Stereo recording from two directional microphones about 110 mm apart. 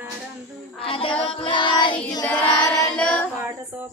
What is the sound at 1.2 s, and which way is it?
Choir, 55° left (ahead or behind).